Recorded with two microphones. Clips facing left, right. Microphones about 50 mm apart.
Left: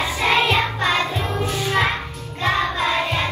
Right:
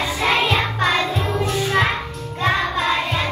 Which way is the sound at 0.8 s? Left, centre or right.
Left.